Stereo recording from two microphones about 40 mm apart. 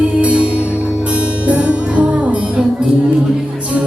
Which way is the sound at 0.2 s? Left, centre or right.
Right.